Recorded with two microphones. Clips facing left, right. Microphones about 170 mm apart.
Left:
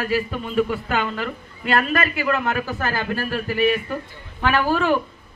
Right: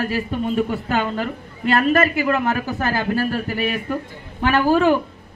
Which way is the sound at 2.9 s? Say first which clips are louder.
Right 7 dB; 40° right (ahead or behind).